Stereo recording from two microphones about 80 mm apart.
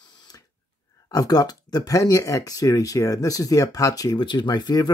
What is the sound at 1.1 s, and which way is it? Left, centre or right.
Speech, left.